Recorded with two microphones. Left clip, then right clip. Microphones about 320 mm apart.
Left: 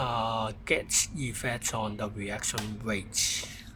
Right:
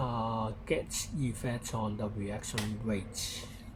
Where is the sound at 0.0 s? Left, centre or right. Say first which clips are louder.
Left 5 dB; left.